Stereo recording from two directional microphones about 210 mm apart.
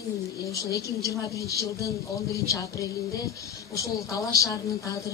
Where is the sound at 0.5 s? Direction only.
15° left (ahead or behind).